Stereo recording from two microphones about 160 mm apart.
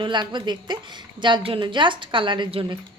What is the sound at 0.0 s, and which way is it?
A woman's voice, 30° right (ahead or behind).